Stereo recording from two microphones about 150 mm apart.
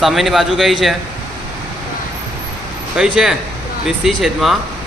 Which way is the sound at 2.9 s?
5° right (ahead or behind).